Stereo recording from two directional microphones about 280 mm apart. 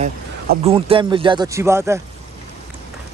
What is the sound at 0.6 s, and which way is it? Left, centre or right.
Speech, centre.